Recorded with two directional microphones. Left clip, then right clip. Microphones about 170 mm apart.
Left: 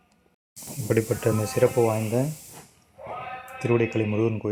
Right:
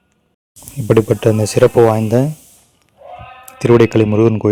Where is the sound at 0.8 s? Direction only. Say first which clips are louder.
Right 12 dB; 40° right (ahead or behind).